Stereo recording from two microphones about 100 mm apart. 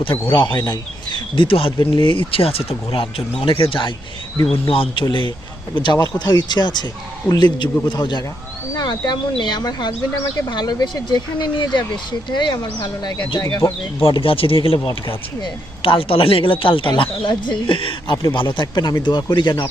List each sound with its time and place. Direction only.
0.6 s speech: 45° left (ahead or behind)
4.5 s speech: 65° left (ahead or behind)
5.0 s speech: 55° left (ahead or behind)
13.4 s speech: 30° left (ahead or behind)
14.0 s speech: 65° left (ahead or behind)
16.9 s speech: 50° left (ahead or behind)